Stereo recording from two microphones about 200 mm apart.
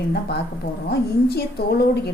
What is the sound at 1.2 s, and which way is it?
Speech, 50° left (ahead or behind).